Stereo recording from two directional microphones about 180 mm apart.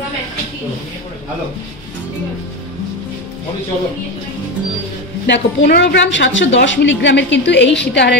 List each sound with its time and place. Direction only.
5.2 s a woman's voice: 65° left (ahead or behind)